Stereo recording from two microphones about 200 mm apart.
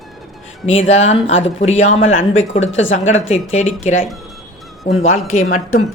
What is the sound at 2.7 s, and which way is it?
Speech, 75° left (ahead or behind).